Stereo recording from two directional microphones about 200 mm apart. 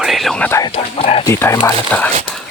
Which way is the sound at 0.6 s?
30° left (ahead or behind).